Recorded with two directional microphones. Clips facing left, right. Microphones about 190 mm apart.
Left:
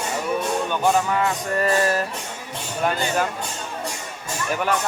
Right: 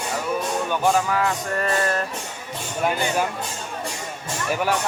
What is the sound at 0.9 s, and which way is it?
Music, centre (ahead or behind).